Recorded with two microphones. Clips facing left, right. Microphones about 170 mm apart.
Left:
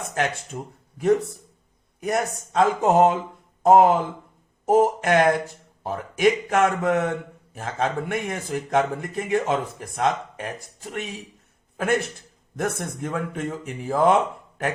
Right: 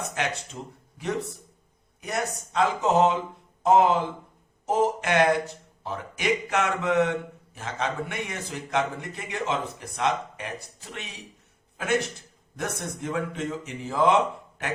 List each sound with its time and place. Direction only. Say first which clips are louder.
0.1 s a man's voice: left 4 dB; 50° left (ahead or behind)